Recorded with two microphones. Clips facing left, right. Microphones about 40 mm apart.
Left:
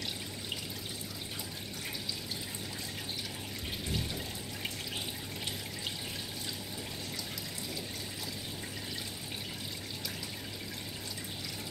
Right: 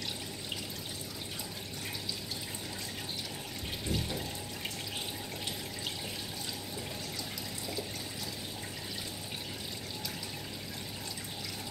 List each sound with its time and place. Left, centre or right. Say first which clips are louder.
3.8 s water: right 3 dB; centre